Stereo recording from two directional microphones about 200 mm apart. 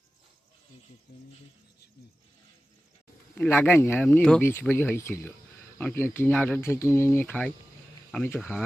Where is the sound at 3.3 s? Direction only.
10° left (ahead or behind).